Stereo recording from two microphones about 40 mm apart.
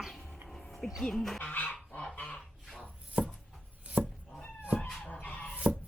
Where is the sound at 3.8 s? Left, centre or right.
Right.